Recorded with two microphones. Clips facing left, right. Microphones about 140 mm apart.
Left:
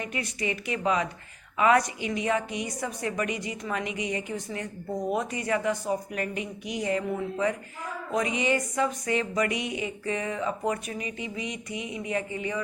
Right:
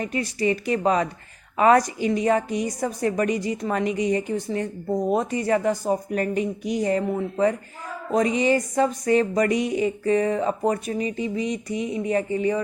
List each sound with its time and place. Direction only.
0.0 s a woman's voice: 35° right (ahead or behind)